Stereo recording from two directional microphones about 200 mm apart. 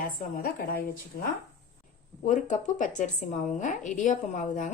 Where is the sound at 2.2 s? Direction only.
40° left (ahead or behind).